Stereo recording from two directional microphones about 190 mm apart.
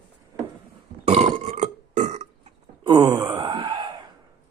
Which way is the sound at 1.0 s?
35° right (ahead or behind).